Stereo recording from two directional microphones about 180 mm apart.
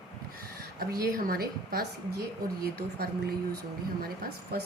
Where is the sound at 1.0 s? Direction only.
60° right (ahead or behind).